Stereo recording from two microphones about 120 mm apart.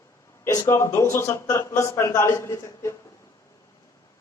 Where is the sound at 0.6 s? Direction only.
25° left (ahead or behind).